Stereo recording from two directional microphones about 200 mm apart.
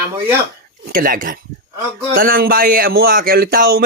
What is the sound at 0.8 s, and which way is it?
Speech, 45° right (ahead or behind).